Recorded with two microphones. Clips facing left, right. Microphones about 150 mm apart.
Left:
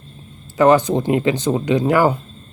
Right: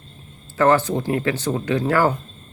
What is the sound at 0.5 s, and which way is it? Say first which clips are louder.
Speech: left 4 dB; 15° left (ahead or behind).